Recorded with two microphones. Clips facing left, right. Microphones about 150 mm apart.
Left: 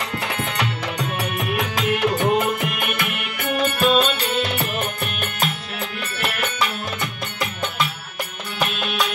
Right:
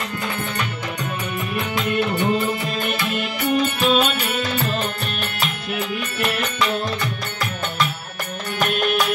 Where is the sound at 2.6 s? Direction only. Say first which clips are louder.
Right 1 dB; 65° left (ahead or behind).